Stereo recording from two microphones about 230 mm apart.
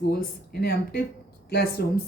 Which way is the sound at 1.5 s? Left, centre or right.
Left.